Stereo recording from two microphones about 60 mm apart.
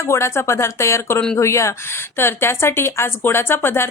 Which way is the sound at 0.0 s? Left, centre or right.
Left.